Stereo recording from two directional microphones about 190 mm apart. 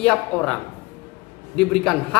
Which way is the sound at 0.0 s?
5° left (ahead or behind).